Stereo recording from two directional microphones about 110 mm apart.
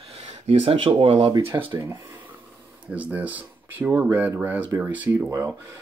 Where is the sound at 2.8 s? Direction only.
15° right (ahead or behind).